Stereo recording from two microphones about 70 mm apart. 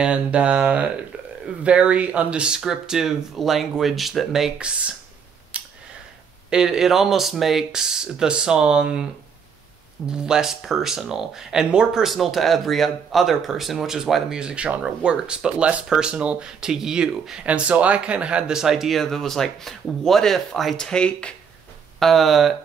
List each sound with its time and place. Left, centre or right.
0.0 s speech: centre
4.6 s speech: centre
5.5 s a sound: centre
6.5 s speech: centre
10.0 s speech: centre
20.7 s speech: centre
22.0 s speech: centre